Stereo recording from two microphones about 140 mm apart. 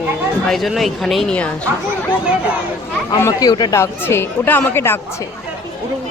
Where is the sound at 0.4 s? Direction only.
Centre (ahead or behind).